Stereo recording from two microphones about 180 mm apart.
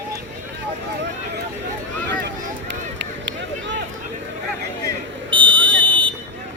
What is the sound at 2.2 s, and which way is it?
Run, 75° right (ahead or behind).